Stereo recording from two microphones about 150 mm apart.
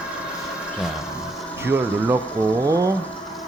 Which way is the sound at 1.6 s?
15° right (ahead or behind).